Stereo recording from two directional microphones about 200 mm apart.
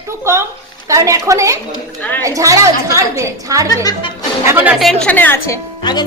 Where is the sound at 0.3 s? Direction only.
15° right (ahead or behind).